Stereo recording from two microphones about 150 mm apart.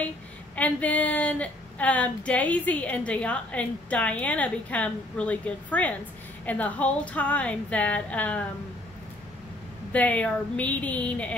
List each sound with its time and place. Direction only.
0.6 s a woman's voice: 10° left (ahead or behind)
9.9 s a woman's voice: 10° left (ahead or behind)